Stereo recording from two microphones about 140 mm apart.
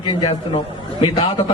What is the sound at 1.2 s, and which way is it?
Speech, 40° left (ahead or behind).